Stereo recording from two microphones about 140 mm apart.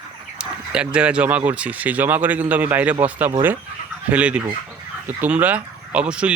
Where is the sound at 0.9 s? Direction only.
10° right (ahead or behind).